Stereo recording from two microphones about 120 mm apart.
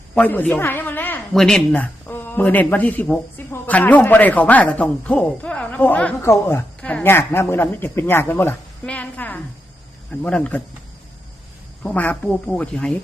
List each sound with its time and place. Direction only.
0.1 s speech: 15° left (ahead or behind)
1.3 s a woman's voice: 5° left (ahead or behind)
11.8 s speech: 10° left (ahead or behind)